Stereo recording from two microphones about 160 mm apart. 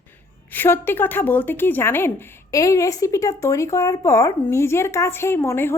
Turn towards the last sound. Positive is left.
turn(degrees=15)  # may be behind; listen again after turning